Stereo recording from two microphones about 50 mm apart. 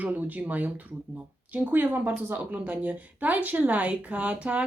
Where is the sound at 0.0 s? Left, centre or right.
Right.